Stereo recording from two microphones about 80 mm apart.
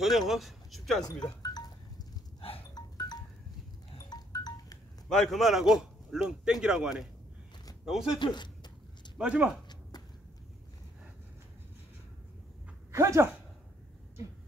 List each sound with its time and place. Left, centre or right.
0.0 s speech: centre
1.0 s a sound: left
2.7 s wind chime: left
5.1 s a man's voice: centre
8.2 s a sound: left
9.2 s speech: centre
12.9 s speech: right